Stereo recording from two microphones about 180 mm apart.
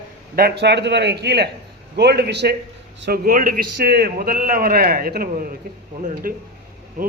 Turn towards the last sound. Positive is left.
turn(degrees=-50)  # may be behind; listen again after turning